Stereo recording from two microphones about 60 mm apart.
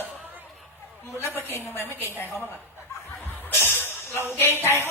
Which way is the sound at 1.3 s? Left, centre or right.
Left.